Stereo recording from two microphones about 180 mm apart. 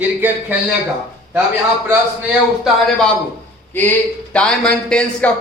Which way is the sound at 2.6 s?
5° left (ahead or behind).